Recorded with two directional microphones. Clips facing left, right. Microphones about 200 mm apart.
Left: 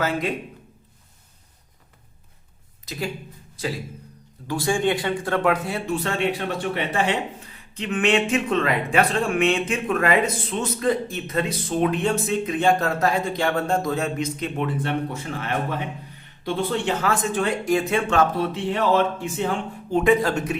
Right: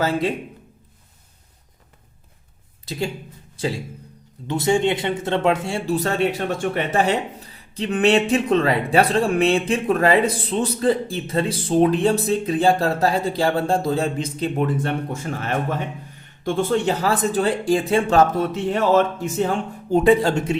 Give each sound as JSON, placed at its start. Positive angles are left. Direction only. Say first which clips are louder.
{"t": 0.0, "sound": "speech", "louder": "right 3 dB", "side_deg": -30}
{"t": 2.8, "sound": "speech", "louder": "right 4 dB", "side_deg": -30}
{"t": 4.4, "sound": "speech", "louder": "right 3 dB", "side_deg": -20}
{"t": 14.8, "sound": "speech", "louder": "right 1 dB", "side_deg": -45}
{"t": 16.4, "sound": "speech", "louder": "right 4 dB", "side_deg": -45}